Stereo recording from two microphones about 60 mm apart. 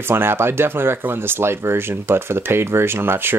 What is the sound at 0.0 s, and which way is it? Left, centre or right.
Speech, right.